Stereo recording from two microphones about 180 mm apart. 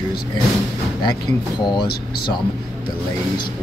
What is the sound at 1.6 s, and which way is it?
Speech, 25° left (ahead or behind).